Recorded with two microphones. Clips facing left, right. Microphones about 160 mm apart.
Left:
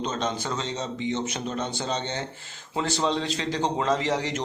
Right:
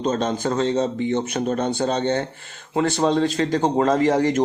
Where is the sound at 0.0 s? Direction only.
50° right (ahead or behind).